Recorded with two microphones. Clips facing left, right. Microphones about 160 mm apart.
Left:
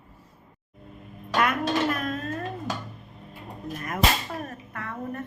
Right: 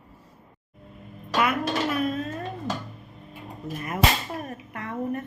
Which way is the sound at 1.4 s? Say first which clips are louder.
Even; 5° right (ahead or behind).